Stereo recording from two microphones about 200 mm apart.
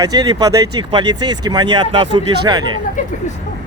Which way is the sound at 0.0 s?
20° right (ahead or behind).